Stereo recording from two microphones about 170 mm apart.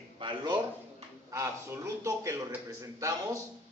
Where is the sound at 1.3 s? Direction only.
20° right (ahead or behind).